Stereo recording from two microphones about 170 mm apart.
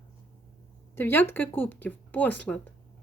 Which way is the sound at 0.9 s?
10° left (ahead or behind).